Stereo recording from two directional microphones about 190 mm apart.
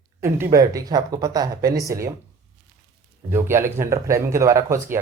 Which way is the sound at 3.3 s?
15° right (ahead or behind).